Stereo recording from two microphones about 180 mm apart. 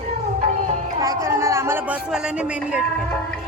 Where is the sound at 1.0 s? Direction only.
20° right (ahead or behind).